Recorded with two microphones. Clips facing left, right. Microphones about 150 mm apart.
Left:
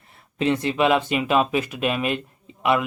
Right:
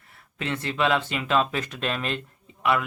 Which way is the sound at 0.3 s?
15° left (ahead or behind).